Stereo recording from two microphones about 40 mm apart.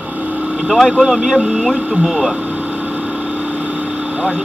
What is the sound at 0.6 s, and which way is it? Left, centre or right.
Speech, centre.